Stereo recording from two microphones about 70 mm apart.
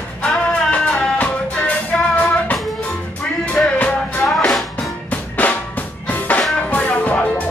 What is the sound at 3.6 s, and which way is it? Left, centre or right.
Music, centre.